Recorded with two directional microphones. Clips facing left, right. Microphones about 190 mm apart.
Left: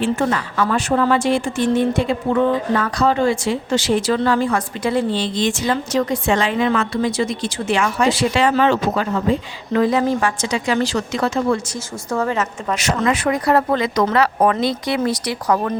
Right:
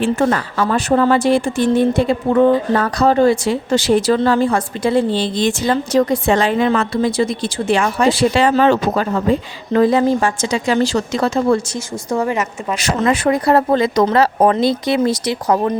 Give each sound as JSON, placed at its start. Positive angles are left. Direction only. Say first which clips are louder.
{"t": 0.0, "sound": "speech", "louder": "right 3 dB", "side_deg": -45}
{"t": 0.5, "sound": "a woman's voice", "louder": "right 3 dB", "side_deg": -35}
{"t": 12.1, "sound": "a woman's voice", "louder": "right 2 dB", "side_deg": -10}
{"t": 12.7, "sound": "a woman's voice", "louder": "right 2 dB", "side_deg": -30}